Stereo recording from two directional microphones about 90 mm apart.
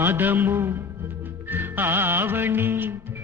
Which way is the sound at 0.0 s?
25° right (ahead or behind).